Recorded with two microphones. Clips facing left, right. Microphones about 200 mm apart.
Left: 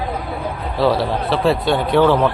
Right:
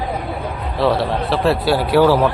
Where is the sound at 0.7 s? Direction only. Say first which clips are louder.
Even; centre (ahead or behind).